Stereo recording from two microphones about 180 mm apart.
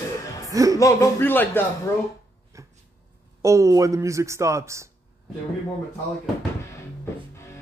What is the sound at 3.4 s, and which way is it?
Speech, 15° right (ahead or behind).